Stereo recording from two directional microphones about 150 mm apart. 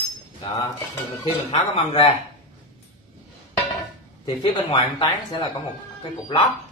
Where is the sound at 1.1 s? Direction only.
35° left (ahead or behind).